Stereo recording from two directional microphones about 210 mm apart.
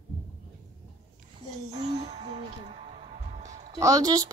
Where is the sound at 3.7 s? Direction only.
15° right (ahead or behind).